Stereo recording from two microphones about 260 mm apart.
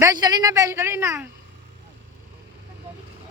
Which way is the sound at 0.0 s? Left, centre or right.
Centre.